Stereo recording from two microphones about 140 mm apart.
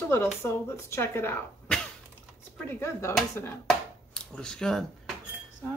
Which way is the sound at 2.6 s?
20° left (ahead or behind).